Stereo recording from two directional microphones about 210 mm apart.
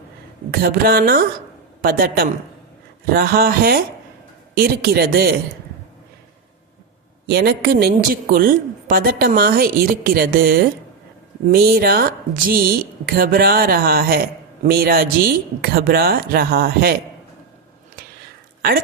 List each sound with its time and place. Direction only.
0.5 s a woman's voice: 45° right (ahead or behind)
7.3 s a woman's voice: 50° right (ahead or behind)